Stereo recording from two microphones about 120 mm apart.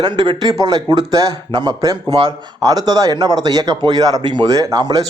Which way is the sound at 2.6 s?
30° right (ahead or behind).